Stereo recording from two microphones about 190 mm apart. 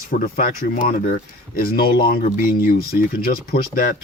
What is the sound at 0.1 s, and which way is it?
Speech, 50° left (ahead or behind).